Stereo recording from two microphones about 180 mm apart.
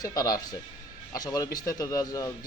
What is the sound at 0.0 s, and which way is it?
Speech, 20° left (ahead or behind).